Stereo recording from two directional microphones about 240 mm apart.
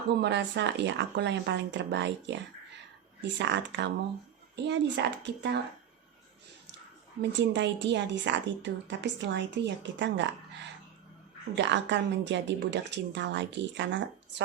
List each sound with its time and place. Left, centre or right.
0.2 s a woman's voice: right
7.2 s a woman's voice: right
11.5 s a woman's voice: right